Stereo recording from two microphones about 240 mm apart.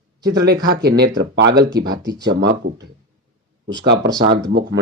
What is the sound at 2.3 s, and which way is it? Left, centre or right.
Speech, right.